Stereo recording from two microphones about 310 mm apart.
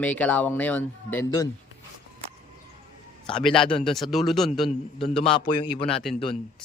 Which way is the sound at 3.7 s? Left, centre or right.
Centre.